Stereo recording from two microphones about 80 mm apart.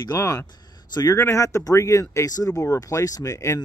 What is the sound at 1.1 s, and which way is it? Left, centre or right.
Speech, left.